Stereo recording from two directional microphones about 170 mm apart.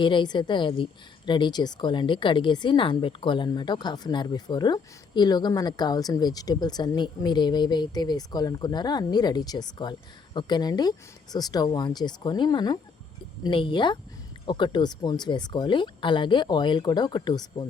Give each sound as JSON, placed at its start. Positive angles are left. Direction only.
{"t": 0.0, "sound": "a woman's voice", "side_deg": 25}